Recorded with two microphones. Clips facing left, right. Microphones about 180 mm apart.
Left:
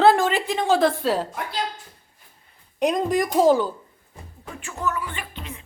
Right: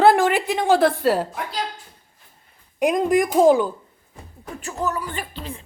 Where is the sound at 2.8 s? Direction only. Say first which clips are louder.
Right 3 dB; 5° right (ahead or behind).